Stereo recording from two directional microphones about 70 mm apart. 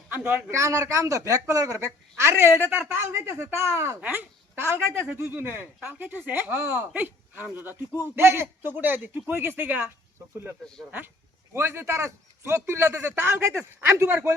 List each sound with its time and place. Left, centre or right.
0.2 s speech: centre
0.5 s a man's voice: right
4.0 s a man's voice: right
11.5 s a man's voice: right